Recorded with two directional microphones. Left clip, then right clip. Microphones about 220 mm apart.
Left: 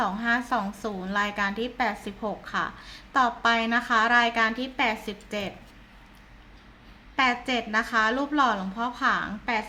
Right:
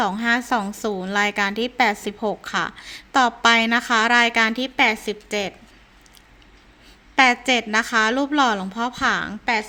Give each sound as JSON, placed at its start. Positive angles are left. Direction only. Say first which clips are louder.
{"t": 0.0, "sound": "a woman's voice", "louder": "right 5 dB", "side_deg": -45}
{"t": 7.2, "sound": "a woman's voice", "louder": "right 8 dB", "side_deg": -45}